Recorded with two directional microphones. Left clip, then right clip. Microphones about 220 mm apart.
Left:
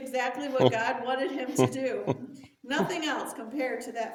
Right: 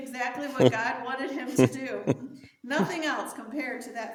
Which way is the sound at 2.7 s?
5° right (ahead or behind).